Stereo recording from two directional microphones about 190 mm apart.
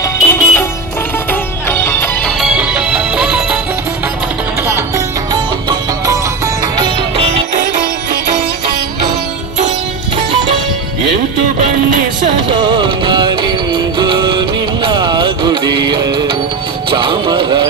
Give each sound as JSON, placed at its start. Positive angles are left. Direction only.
{"t": 0.0, "sound": "music", "side_deg": 10}
{"t": 2.4, "sound": "music", "side_deg": -5}
{"t": 4.6, "sound": "music", "side_deg": -20}
{"t": 7.2, "sound": "music", "side_deg": -30}
{"t": 11.4, "sound": "music", "side_deg": -40}